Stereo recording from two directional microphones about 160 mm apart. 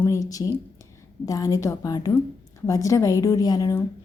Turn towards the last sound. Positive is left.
turn(degrees=20)  # may be behind; listen again after turning